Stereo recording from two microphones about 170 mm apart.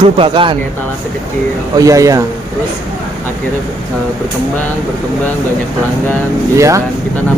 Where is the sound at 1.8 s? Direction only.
20° right (ahead or behind).